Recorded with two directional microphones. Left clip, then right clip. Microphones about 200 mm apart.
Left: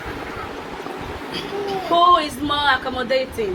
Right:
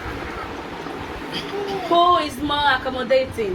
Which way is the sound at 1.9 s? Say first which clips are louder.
Left 2 dB; 10° left (ahead or behind).